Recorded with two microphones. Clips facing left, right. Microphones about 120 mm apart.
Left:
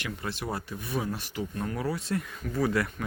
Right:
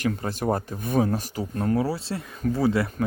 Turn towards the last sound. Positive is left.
turn(degrees=-25)  # may be behind; listen again after turning